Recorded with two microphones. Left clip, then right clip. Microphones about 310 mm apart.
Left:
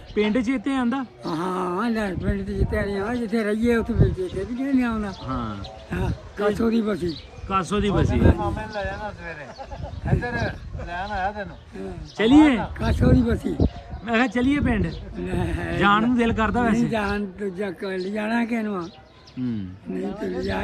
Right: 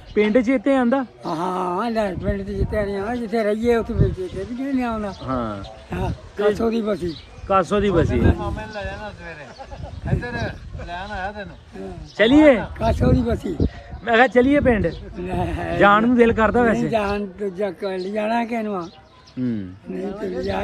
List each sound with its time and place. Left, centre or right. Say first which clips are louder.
0.3 s speech: right 7 dB; centre
8.5 s speech: left 1 dB; left
11.7 s speech: right 2 dB; centre
15.8 s speech: right 6 dB; centre
20.0 s speech: right 2 dB; left